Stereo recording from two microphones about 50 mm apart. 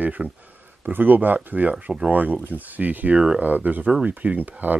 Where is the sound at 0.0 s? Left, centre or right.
Right.